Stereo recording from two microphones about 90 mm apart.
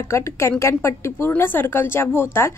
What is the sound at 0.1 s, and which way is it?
A woman's voice, 30° left (ahead or behind).